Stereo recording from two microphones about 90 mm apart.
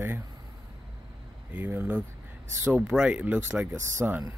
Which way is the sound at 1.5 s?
20° right (ahead or behind).